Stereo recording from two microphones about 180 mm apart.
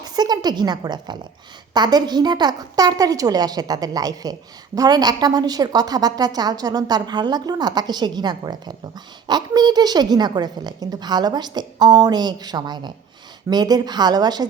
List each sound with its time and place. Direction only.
0.0 s a woman's voice: 20° right (ahead or behind)